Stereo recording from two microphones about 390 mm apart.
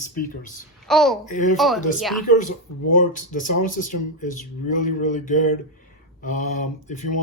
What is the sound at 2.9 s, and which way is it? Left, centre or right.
Speech, centre.